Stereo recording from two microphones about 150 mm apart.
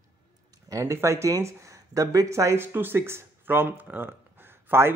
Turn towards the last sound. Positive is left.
turn(degrees=-15)  # may be behind; listen again after turning